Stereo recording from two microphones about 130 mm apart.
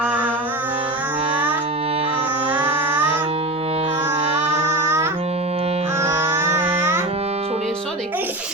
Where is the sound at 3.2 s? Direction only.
50° right (ahead or behind).